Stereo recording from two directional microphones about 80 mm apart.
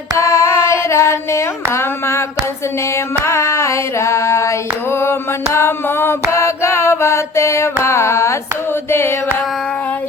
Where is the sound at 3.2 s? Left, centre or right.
Left.